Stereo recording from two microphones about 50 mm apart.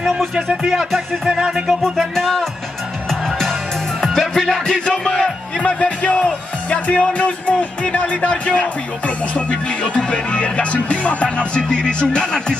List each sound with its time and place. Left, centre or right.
0.7 s music: centre
1.8 s music: centre
5.6 s speech: left